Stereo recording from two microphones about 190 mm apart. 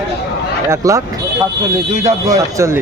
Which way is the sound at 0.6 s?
15° right (ahead or behind).